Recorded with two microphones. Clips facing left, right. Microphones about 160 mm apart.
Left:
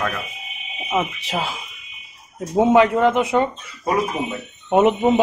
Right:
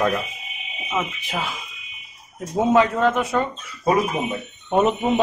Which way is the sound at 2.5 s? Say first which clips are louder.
Left 3 dB; 20° left (ahead or behind).